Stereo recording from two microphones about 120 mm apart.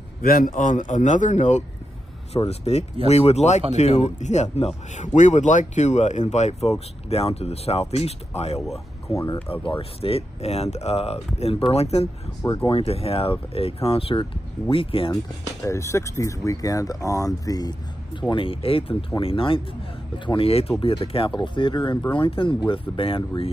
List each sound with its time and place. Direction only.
0.6 s speech: 90° left
2.3 s speech: 60° left (ahead or behind)
4.9 s speech: 90° left
6.3 s speech: 70° left (ahead or behind)
7.1 s speech: 60° left (ahead or behind)
8.5 s speech: centre (ahead or behind)
9.1 s speech: 25° left (ahead or behind)
9.5 s speech: 45° left (ahead or behind)
15.6 s speech: 25° left (ahead or behind)
18.3 s speech: 50° left (ahead or behind)